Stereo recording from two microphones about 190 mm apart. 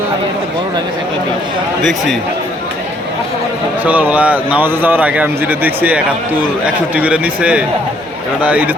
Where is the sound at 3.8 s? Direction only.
10° right (ahead or behind).